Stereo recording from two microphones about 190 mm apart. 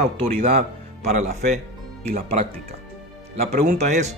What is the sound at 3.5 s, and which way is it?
Speech, 40° right (ahead or behind).